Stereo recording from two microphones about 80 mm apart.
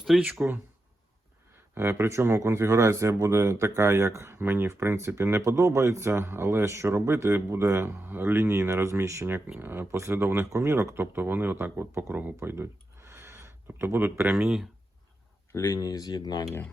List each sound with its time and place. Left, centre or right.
0.3 s speech: right
1.7 s speech: right
15.7 s speech: left